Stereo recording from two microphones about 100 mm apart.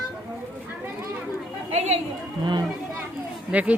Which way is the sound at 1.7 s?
90° right.